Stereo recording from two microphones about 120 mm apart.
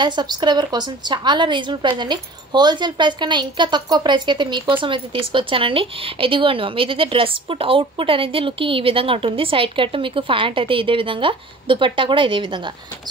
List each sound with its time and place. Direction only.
0.0 s a woman's voice: 40° right (ahead or behind)